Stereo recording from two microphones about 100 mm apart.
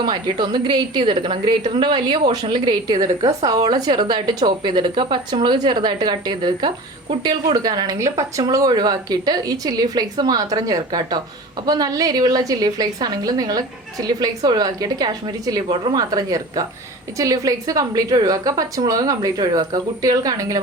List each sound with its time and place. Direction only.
0.0 s a woman's voice: 45° right (ahead or behind)
7.9 s a woman's voice: 30° right (ahead or behind)